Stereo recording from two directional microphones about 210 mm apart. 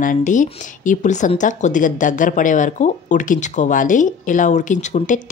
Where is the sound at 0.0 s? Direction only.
40° left (ahead or behind).